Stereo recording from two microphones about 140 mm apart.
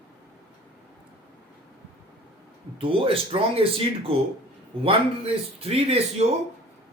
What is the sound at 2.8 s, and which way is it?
Speech, 40° right (ahead or behind).